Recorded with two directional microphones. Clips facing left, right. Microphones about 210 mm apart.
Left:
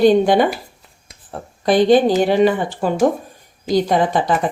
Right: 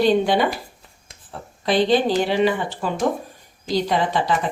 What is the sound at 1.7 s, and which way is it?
A woman's voice, 50° left (ahead or behind).